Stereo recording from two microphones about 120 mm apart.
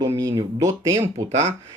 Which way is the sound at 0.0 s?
35° right (ahead or behind).